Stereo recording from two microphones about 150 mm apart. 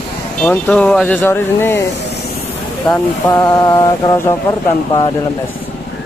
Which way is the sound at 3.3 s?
20° left (ahead or behind).